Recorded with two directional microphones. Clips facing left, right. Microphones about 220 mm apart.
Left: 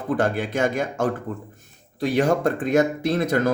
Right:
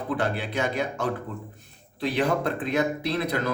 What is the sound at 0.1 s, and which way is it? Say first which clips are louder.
Speech: left 6 dB; 45° left (ahead or behind).